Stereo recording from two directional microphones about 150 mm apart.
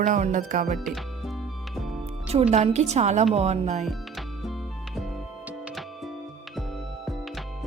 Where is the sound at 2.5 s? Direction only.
50° right (ahead or behind).